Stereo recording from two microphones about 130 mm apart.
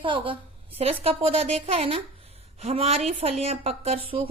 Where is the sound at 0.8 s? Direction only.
50° right (ahead or behind).